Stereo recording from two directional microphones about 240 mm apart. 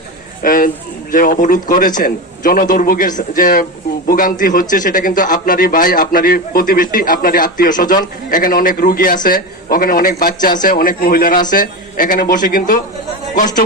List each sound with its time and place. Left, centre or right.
0.4 s a man's voice: left